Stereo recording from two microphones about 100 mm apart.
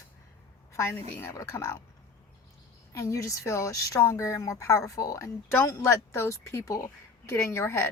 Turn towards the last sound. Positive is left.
turn(degrees=25)  # may be behind; listen again after turning